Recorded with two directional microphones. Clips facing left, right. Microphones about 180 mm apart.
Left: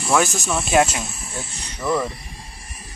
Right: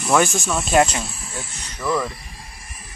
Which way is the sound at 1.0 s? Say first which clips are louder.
Left 1 dB; 20° left (ahead or behind).